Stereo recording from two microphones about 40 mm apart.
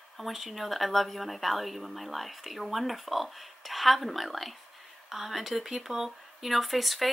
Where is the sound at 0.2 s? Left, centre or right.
Centre.